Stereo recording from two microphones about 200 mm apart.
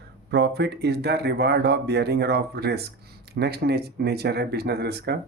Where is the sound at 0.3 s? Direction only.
55° right (ahead or behind).